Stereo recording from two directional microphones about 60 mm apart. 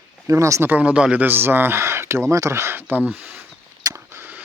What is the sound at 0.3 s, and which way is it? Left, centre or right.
Speech, right.